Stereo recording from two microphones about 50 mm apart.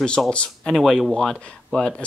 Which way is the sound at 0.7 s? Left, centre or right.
Centre.